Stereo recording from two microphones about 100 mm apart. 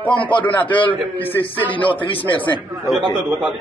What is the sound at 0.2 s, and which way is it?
Speech, 55° left (ahead or behind).